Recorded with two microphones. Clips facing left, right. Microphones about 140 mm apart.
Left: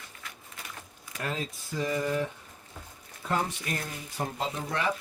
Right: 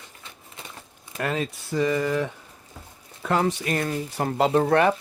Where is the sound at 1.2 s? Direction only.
70° right (ahead or behind).